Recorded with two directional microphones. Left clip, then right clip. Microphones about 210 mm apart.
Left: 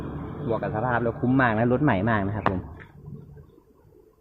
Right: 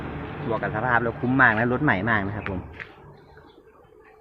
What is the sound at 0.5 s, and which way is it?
Speech, 10° left (ahead or behind).